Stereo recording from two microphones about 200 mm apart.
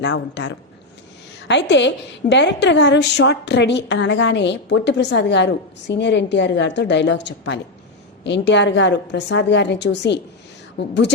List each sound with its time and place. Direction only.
0.0 s a woman's voice: 60° left (ahead or behind)